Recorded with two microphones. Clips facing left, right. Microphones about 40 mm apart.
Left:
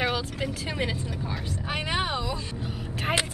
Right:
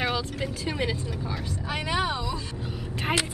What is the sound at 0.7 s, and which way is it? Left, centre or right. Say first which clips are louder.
Speech: right 1 dB; centre.